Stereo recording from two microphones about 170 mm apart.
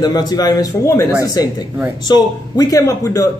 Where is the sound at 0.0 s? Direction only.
25° left (ahead or behind).